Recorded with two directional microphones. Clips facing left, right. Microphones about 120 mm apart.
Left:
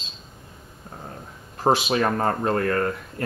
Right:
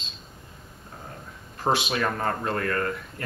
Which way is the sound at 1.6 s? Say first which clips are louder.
Left 4 dB; 35° left (ahead or behind).